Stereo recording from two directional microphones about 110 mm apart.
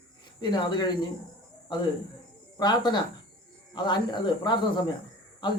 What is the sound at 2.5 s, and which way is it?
Speech, 40° left (ahead or behind).